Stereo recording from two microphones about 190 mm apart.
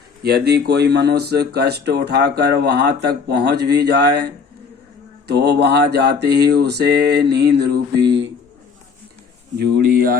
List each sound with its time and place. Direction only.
0.2 s speech: 55° right (ahead or behind)
5.3 s speech: 60° right (ahead or behind)